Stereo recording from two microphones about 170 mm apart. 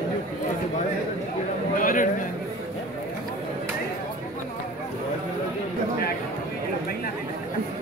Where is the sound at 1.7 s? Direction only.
55° left (ahead or behind).